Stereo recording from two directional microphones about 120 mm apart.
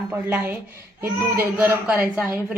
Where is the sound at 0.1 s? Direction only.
15° right (ahead or behind).